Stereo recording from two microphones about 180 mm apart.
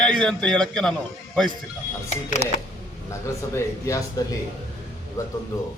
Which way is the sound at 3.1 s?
15° left (ahead or behind).